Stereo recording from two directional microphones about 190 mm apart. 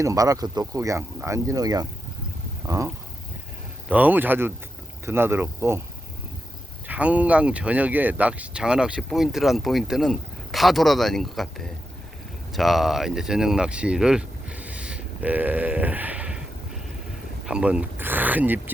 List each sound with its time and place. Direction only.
0.0 s speech: 15° right (ahead or behind)
2.6 s a sound: 15° right (ahead or behind)
3.8 s speech: 10° right (ahead or behind)
6.8 s speech: 10° right (ahead or behind)
17.4 s speech: 5° right (ahead or behind)